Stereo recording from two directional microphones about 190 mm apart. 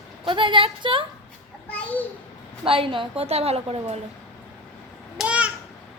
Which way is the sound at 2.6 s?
30° right (ahead or behind).